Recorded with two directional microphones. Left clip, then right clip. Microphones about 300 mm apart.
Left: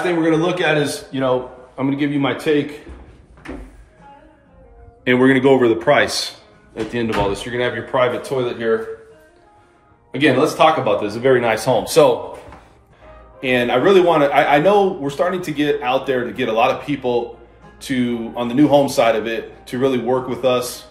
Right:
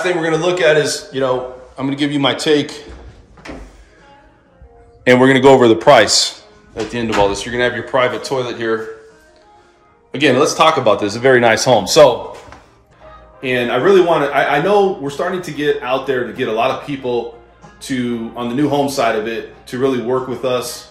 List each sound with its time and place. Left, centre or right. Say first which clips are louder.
0.0 s a man's voice: right 1 dB; centre
5.0 s a man's voice: right 5 dB; centre
10.1 s a man's voice: right 3 dB; centre
11.2 s speech: right 5 dB; right
13.4 s a man's voice: even; centre